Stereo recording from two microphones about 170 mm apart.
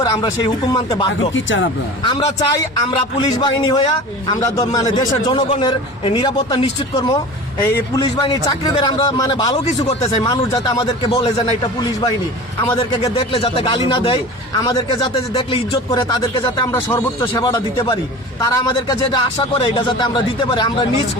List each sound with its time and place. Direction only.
0.0 s a man's voice: 20° left (ahead or behind)
1.3 s speech: 90° left
2.0 s a man's voice: 25° left (ahead or behind)
9.6 s speech: 40° left (ahead or behind)
10.2 s a man's voice: 25° left (ahead or behind)
12.7 s a man's voice: 30° left (ahead or behind)